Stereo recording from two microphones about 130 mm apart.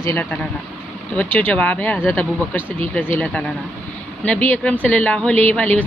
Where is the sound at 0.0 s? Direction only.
15° left (ahead or behind).